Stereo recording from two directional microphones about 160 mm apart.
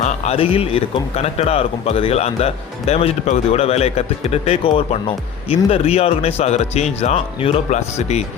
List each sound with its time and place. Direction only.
0.0 s a man's voice: 40° left (ahead or behind)